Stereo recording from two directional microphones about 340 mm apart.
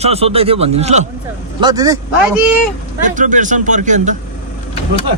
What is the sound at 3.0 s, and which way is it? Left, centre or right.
Speech, right.